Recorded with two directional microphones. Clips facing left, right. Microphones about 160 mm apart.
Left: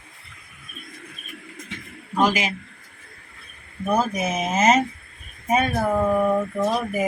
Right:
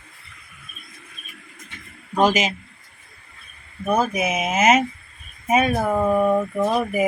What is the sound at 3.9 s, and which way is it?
Speech, 10° right (ahead or behind).